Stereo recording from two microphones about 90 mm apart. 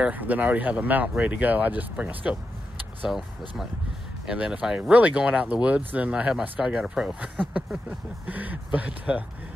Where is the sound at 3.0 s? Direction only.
Centre (ahead or behind).